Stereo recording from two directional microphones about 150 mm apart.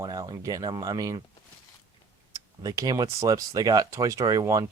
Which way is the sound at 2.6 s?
25° right (ahead or behind).